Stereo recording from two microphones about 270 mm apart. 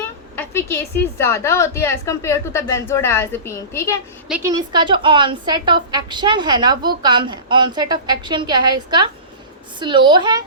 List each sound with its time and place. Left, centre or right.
0.3 s a sound: centre
1.2 s a woman's voice: centre
4.3 s a woman's voice: centre